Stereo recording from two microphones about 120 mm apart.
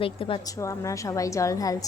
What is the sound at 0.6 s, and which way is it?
Speech, 25° left (ahead or behind).